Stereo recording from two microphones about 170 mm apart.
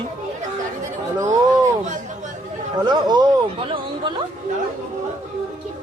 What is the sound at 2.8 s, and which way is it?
Speech, 25° right (ahead or behind).